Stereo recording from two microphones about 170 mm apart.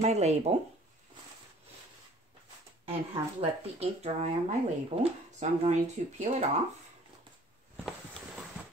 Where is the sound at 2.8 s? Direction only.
35° right (ahead or behind).